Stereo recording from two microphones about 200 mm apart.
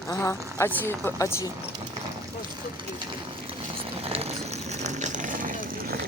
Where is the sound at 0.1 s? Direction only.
15° left (ahead or behind).